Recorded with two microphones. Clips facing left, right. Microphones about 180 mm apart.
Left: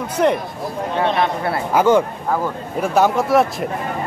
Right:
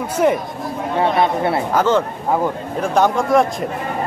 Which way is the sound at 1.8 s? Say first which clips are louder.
Left 5 dB; 10° left (ahead or behind).